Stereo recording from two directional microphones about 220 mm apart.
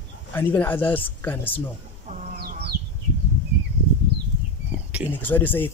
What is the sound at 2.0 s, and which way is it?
Chicken, 35° right (ahead or behind).